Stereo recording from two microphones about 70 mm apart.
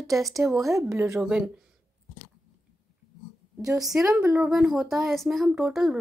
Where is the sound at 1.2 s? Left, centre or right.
Centre.